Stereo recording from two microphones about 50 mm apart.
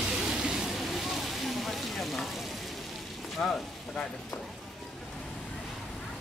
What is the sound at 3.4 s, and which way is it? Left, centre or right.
Speech, centre.